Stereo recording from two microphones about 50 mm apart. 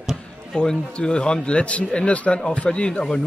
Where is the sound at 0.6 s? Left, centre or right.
Centre.